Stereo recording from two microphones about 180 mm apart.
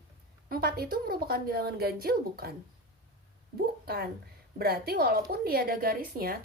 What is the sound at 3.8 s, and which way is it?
A woman's voice, 60° right (ahead or behind).